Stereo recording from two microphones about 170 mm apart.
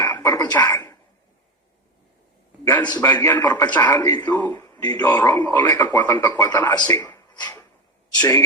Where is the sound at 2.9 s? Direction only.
15° left (ahead or behind).